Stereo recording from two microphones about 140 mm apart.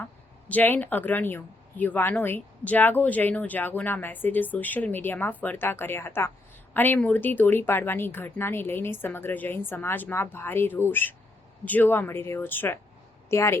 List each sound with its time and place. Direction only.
0.0 s a woman's voice: 10° left (ahead or behind)